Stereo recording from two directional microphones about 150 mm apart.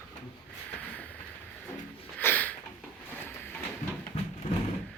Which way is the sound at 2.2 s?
10° left (ahead or behind).